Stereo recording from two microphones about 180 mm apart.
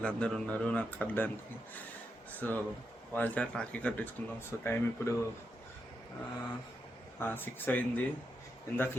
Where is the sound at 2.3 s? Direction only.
10° left (ahead or behind).